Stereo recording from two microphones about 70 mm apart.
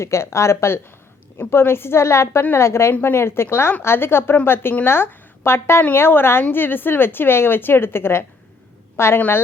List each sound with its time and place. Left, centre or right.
0.0 s a woman's voice: left